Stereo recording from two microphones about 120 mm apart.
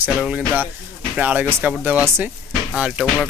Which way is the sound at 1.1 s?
10° right (ahead or behind).